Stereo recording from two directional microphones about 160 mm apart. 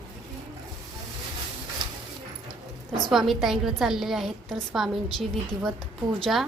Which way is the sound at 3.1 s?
Centre (ahead or behind).